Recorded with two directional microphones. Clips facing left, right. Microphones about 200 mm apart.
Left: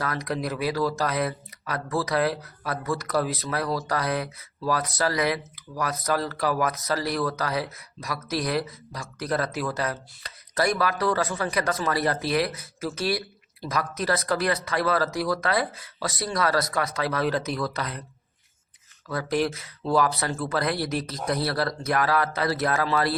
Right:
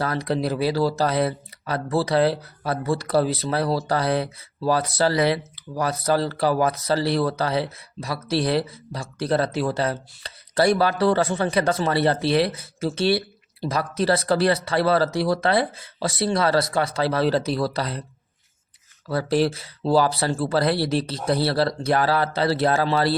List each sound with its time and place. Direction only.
0.0 s speech: 30° right (ahead or behind)
19.0 s speech: 30° right (ahead or behind)